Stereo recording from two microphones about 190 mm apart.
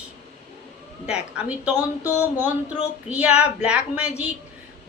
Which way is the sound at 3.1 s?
5° right (ahead or behind).